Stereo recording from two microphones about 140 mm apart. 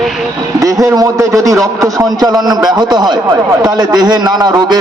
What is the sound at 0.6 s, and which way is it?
A man's voice, 25° right (ahead or behind).